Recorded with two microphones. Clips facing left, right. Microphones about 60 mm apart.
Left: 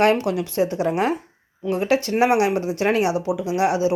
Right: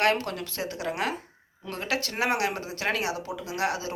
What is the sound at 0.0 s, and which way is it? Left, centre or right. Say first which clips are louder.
Speech: left 7 dB; left.